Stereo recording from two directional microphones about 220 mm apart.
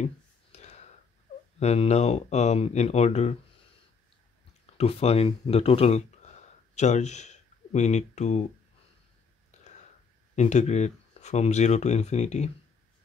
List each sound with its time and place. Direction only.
0.0 s clicking: 30° left (ahead or behind)
1.6 s speech: 30° left (ahead or behind)
4.7 s speech: 25° left (ahead or behind)
10.3 s speech: 30° left (ahead or behind)